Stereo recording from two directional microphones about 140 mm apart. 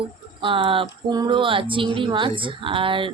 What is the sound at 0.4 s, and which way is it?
Speech, 40° right (ahead or behind).